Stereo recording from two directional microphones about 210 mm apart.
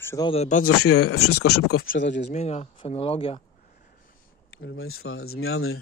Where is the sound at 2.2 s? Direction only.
30° left (ahead or behind).